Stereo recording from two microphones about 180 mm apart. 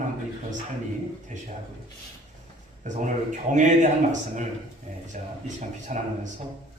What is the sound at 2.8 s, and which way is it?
Speech, 45° right (ahead or behind).